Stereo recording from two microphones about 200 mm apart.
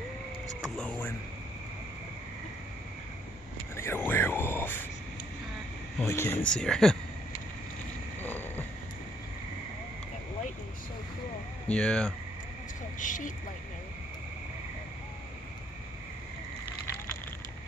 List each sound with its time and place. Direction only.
0.6 s speech: 5° left (ahead or behind)
3.7 s a sound: 10° left (ahead or behind)
6.0 s speech: 10° left (ahead or behind)
8.2 s frog: 10° left (ahead or behind)
11.6 s speech: 5° left (ahead or behind)
13.0 s speech: 40° left (ahead or behind)